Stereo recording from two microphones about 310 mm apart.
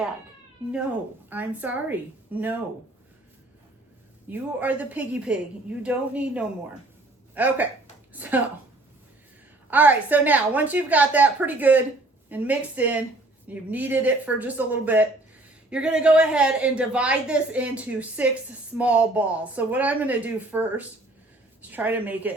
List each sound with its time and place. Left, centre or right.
1.3 s a man's voice: centre
4.3 s a man's voice: centre
9.6 s a man's voice: centre